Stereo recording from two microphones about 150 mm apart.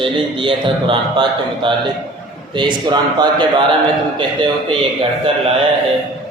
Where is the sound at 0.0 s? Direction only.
35° right (ahead or behind).